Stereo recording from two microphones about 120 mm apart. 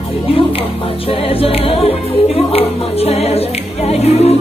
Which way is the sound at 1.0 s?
50° left (ahead or behind).